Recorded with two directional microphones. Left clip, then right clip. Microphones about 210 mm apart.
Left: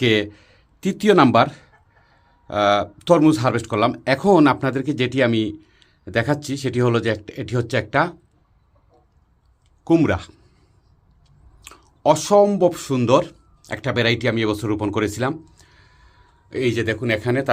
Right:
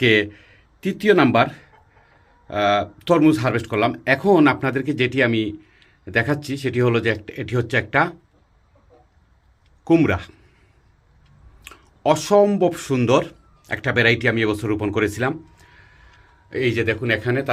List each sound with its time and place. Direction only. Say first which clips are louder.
0.0 s a man's voice: right 2 dB; 20° left (ahead or behind)
9.8 s speech: even; 15° left (ahead or behind)
12.1 s a man's voice: even; 15° left (ahead or behind)